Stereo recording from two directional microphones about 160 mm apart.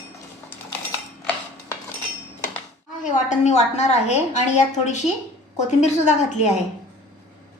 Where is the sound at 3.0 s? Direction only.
50° left (ahead or behind).